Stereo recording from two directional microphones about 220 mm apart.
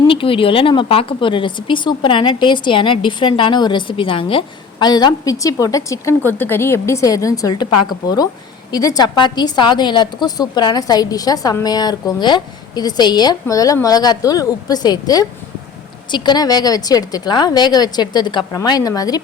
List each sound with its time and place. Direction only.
0.0 s a woman's voice: 25° left (ahead or behind)